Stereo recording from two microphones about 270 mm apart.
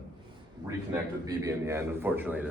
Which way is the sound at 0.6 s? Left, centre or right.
Centre.